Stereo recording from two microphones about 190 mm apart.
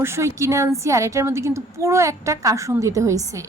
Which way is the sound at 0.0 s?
15° right (ahead or behind).